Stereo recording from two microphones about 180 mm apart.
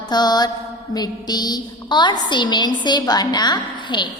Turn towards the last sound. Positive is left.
turn(degrees=25)  # may be behind; listen again after turning